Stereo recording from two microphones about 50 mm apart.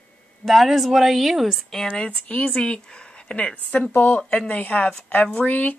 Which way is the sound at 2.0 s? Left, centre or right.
Centre.